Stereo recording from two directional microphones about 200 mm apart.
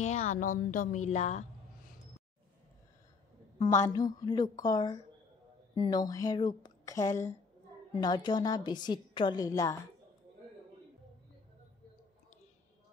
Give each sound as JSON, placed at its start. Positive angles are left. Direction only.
{"t": 0.0, "sound": "speech", "side_deg": 35}
{"t": 3.5, "sound": "a woman's voice", "side_deg": 20}